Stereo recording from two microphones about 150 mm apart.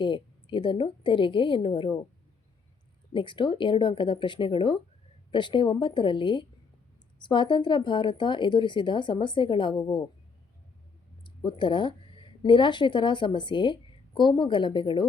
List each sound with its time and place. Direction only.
0.0 s speech: 30° left (ahead or behind)
3.1 s speech: 35° left (ahead or behind)
11.4 s speech: 30° left (ahead or behind)